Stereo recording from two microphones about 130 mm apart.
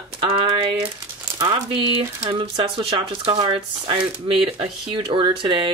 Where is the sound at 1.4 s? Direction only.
40° right (ahead or behind).